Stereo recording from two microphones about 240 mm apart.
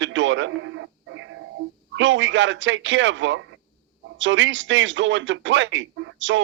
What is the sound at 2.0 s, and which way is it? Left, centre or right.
Speech, right.